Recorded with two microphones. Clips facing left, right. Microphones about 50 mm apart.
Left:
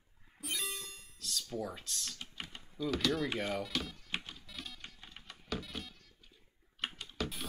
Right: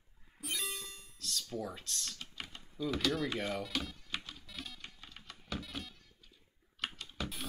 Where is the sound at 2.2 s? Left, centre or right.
Centre.